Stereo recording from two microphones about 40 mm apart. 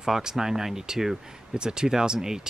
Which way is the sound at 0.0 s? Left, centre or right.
Centre.